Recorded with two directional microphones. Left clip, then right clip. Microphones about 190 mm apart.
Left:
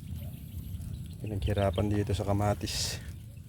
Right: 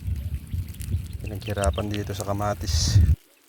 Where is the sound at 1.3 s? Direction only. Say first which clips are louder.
Right 3 dB; 15° left (ahead or behind).